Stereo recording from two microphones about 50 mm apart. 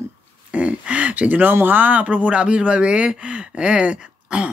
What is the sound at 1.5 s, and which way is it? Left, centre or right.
Speech, right.